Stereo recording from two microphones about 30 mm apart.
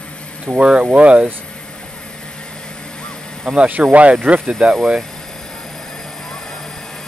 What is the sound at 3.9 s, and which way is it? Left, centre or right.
Speech, right.